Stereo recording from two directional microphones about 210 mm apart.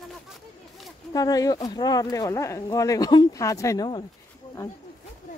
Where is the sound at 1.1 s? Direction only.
20° left (ahead or behind).